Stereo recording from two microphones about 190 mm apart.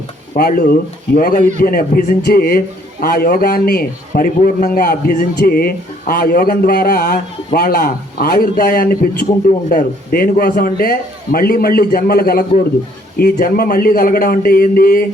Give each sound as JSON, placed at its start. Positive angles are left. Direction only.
{"t": 0.3, "sound": "a man's voice", "side_deg": 50}